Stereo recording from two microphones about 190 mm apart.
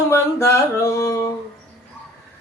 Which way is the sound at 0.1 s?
15° left (ahead or behind).